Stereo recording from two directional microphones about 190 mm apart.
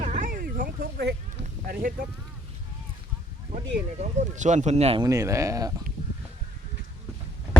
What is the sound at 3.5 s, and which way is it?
Speech, 40° right (ahead or behind).